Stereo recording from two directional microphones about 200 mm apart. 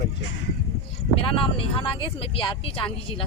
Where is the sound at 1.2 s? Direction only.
25° left (ahead or behind).